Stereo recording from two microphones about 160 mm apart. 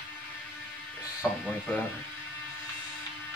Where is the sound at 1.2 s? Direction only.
15° left (ahead or behind).